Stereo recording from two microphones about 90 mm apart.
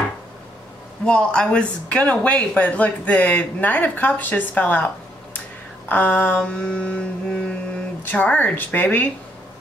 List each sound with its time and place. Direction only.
1.0 s a woman's voice: 10° left (ahead or behind)